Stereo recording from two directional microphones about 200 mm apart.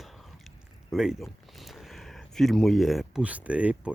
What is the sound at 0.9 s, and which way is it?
Speech, centre (ahead or behind).